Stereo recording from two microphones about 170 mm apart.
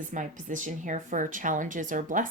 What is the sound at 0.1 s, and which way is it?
Speech, 50° right (ahead or behind).